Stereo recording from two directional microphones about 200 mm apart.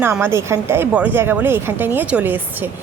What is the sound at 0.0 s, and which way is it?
A woman's voice, 10° right (ahead or behind).